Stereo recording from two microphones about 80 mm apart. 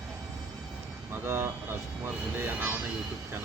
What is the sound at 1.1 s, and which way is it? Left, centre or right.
Speech, right.